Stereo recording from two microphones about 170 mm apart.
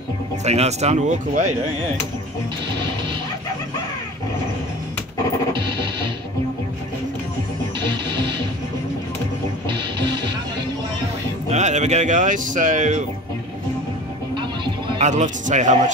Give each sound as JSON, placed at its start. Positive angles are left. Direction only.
{"t": 0.4, "sound": "speech", "side_deg": -40}
{"t": 5.5, "sound": "music", "side_deg": -30}
{"t": 9.7, "sound": "music", "side_deg": -30}
{"t": 11.5, "sound": "speech", "side_deg": -45}
{"t": 14.3, "sound": "music", "side_deg": -30}
{"t": 15.0, "sound": "speech", "side_deg": -45}